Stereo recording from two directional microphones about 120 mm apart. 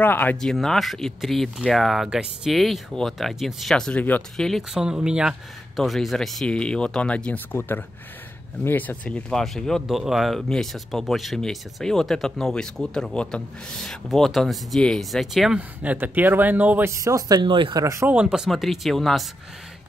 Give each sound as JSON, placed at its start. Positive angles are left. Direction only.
{"t": 0.0, "sound": "speech", "side_deg": 15}
{"t": 0.4, "sound": "speech", "side_deg": 5}
{"t": 4.4, "sound": "speech", "side_deg": 0}
{"t": 18.0, "sound": "speech", "side_deg": -10}